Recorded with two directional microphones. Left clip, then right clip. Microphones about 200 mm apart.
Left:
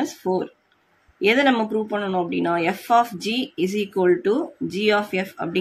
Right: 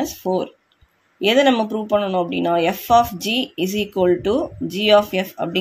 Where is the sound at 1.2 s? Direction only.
20° right (ahead or behind).